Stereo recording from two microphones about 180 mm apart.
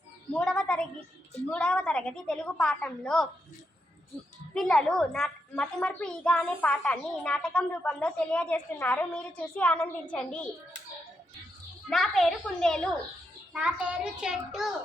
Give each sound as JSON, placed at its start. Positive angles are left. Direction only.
{"t": 0.3, "sound": "a sound", "side_deg": 5}
{"t": 1.5, "sound": "a woman's voice", "side_deg": 5}
{"t": 4.5, "sound": "a woman's voice", "side_deg": 5}
{"t": 11.9, "sound": "a woman's voice", "side_deg": 0}